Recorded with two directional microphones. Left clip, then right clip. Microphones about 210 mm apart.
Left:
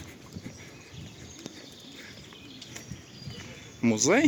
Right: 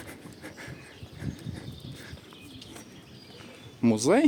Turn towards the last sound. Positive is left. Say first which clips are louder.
# right 1 dB
turn(degrees=-15)  # may be behind; listen again after turning